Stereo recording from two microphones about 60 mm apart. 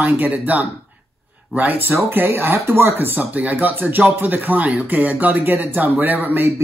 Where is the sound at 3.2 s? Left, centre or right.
Right.